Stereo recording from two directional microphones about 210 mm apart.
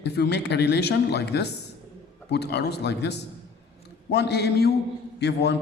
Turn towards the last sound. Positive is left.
turn(degrees=50)  # may be behind; listen again after turning